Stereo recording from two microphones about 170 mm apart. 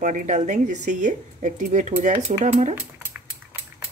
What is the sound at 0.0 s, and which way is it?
Speech, 45° right (ahead or behind).